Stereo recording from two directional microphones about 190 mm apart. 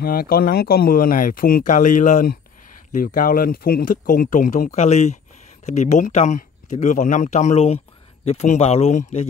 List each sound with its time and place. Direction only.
0.0 s speech: 50° left (ahead or behind); by 9.3 s 35° left (ahead or behind)